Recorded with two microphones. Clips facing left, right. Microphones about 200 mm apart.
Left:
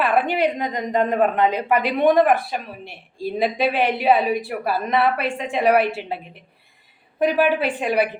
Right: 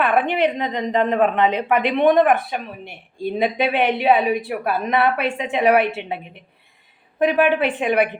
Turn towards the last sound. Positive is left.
turn(degrees=5)  # may be behind; listen again after turning